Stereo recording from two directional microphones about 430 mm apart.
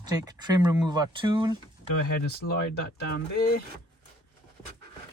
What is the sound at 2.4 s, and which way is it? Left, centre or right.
Speech, left.